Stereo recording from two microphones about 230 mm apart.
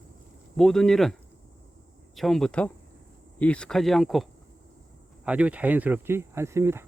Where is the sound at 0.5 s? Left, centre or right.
Centre.